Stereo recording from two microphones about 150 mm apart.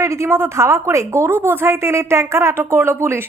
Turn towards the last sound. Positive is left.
turn(degrees=-15)  # may be behind; listen again after turning